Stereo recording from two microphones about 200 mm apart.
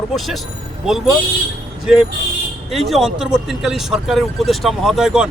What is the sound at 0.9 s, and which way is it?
A man's voice, centre (ahead or behind).